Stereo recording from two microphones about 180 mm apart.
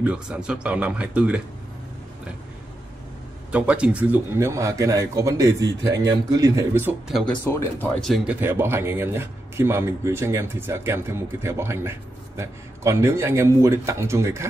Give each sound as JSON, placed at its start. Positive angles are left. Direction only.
{"t": 0.0, "sound": "speech", "side_deg": -5}
{"t": 3.5, "sound": "speech", "side_deg": -5}
{"t": 7.1, "sound": "speech", "side_deg": 0}
{"t": 7.4, "sound": "speech", "side_deg": 10}
{"t": 8.4, "sound": "speech", "side_deg": -15}